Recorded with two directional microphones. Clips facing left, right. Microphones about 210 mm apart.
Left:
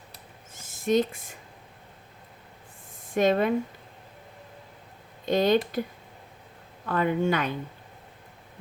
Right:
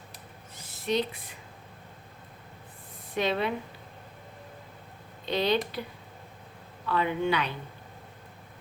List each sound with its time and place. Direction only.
0.5 s a sound: 45° left (ahead or behind)
3.1 s speech: 45° left (ahead or behind)
5.2 s speech: 45° left (ahead or behind)
6.8 s speech: 45° left (ahead or behind)